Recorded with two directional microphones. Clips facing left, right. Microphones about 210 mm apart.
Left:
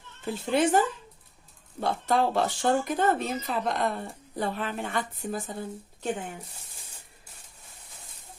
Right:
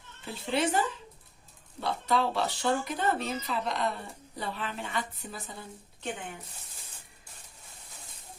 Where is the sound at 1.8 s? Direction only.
50° left (ahead or behind).